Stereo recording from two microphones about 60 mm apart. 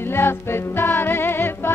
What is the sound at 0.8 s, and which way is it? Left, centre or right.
Music, left.